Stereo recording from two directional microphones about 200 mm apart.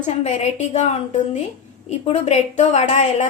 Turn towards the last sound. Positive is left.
turn(degrees=35)  # may be behind; listen again after turning